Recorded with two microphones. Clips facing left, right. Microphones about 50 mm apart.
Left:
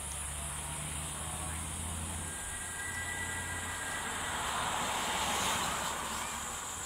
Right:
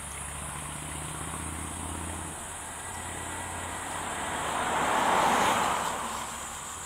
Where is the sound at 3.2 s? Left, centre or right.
Right.